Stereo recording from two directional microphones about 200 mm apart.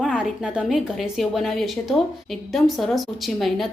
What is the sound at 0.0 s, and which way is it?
A woman's voice, centre (ahead or behind).